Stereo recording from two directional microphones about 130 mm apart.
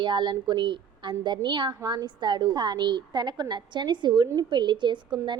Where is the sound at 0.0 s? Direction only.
35° right (ahead or behind).